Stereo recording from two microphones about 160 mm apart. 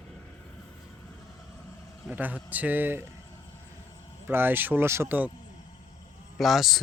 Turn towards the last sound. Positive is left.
turn(degrees=0)  # may be behind; listen again after turning